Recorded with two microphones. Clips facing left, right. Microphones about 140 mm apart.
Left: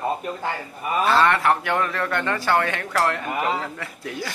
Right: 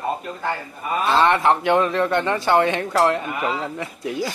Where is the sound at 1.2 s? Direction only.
20° right (ahead or behind).